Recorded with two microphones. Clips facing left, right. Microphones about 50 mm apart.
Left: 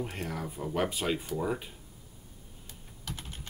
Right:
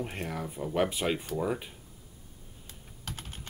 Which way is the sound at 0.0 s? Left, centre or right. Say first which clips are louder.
Right 1 dB; centre.